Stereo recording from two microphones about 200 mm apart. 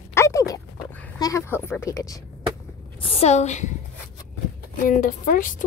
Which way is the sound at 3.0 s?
30° left (ahead or behind).